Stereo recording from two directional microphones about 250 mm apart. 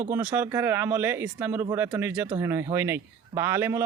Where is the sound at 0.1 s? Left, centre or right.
Centre.